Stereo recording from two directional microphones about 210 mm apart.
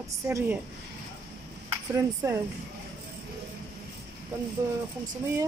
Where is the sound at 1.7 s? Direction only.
15° right (ahead or behind).